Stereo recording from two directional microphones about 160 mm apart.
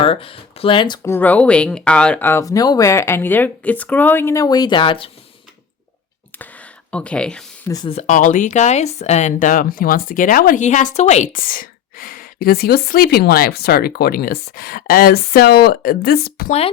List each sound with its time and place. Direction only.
0.0 s speech: 35° left (ahead or behind)
1.0 s speech: 10° left (ahead or behind); by 5.1 s 35° left (ahead or behind)
6.4 s a sound: 10° left (ahead or behind)
7.9 s speech: 45° left (ahead or behind); by 16.5 s 75° left (ahead or behind)